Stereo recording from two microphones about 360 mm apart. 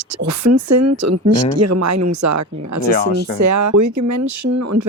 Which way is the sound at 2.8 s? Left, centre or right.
Left.